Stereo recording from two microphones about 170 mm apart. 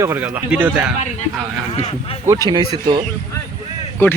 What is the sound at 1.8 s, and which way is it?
Speech, 35° left (ahead or behind).